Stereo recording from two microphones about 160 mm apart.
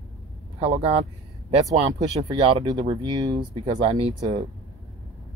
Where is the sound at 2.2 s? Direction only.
30° right (ahead or behind).